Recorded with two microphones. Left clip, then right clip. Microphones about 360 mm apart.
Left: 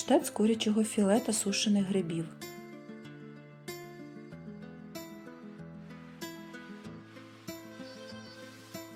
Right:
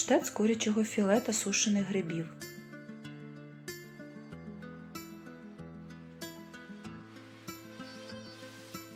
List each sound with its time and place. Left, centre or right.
0.0 s speech: centre
7.4 s music: centre